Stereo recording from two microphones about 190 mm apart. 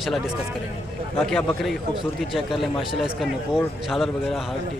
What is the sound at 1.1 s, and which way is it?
A man's voice, 5° left (ahead or behind).